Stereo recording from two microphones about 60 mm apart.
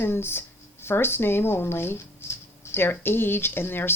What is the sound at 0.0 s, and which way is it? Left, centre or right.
Speech, left.